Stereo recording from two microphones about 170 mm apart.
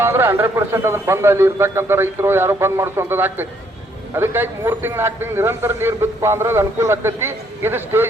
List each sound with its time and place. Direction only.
0.0 s a man's voice: 15° right (ahead or behind)